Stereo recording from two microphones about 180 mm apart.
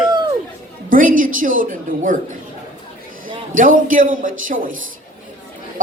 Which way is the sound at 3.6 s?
50° right (ahead or behind).